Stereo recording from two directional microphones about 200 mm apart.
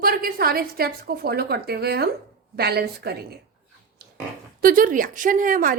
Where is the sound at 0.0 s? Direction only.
45° right (ahead or behind).